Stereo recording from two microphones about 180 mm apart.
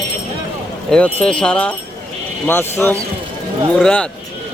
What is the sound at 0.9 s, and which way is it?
Speech, 5° left (ahead or behind).